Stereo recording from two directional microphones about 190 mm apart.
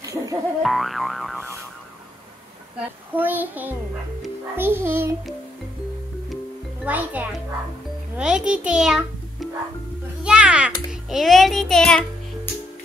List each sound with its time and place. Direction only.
0.0 s boing: 15° right (ahead or behind)
0.6 s a child's voice: centre (ahead or behind)
3.2 s a child's voice: 10° right (ahead or behind)
6.8 s a child's voice: 10° right (ahead or behind)
10.2 s a sound: 5° right (ahead or behind)
10.9 s a child's voice: centre (ahead or behind)